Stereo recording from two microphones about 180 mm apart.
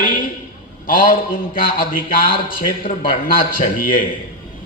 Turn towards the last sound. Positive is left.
turn(degrees=50)  # may be behind; listen again after turning